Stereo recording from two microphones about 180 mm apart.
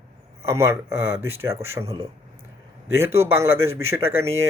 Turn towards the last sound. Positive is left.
turn(degrees=-15)  # may be behind; listen again after turning